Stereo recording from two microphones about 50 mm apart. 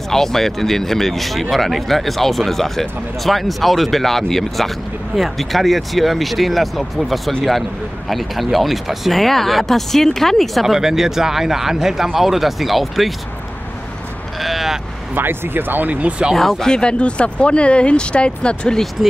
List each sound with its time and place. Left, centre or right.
0.1 s speech: centre
14.4 s speech: centre
15.1 s speech: right
15.9 s speech: right
16.3 s speech: centre
19.0 s speech: centre